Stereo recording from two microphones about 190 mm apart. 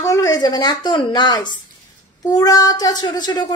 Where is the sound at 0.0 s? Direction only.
15° left (ahead or behind).